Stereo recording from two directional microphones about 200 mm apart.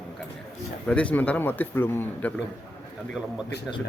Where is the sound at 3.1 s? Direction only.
5° right (ahead or behind).